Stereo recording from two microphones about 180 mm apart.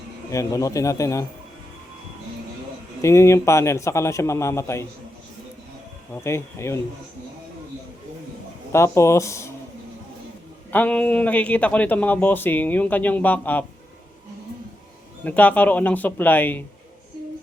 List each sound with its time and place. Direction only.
0.3 s a man's voice: 15° left (ahead or behind)
3.0 s a man's voice: 15° left (ahead or behind)
6.2 s a man's voice: 15° left (ahead or behind)
8.7 s a man's voice: 15° left (ahead or behind)
10.7 s a man's voice: 10° left (ahead or behind)
15.2 s a man's voice: 10° left (ahead or behind)